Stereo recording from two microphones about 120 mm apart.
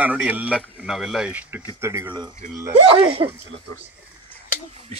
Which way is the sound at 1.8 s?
20° right (ahead or behind).